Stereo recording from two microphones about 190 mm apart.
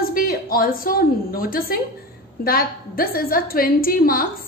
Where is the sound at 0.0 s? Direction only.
50° left (ahead or behind).